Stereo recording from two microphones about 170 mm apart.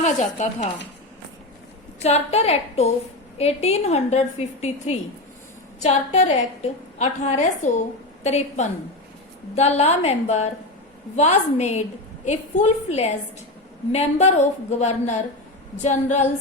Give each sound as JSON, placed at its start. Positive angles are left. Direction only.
{"t": 0.0, "sound": "a woman's voice", "side_deg": 45}
{"t": 2.0, "sound": "a woman's voice", "side_deg": 40}